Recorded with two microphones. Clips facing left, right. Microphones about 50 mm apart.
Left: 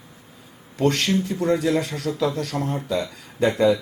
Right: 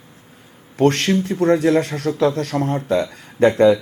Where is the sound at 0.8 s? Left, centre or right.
Right.